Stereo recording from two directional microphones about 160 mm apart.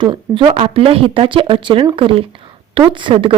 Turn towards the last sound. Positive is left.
turn(degrees=-30)  # may be behind; listen again after turning